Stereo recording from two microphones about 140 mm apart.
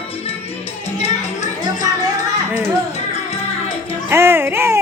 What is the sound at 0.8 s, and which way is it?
Music, 50° left (ahead or behind).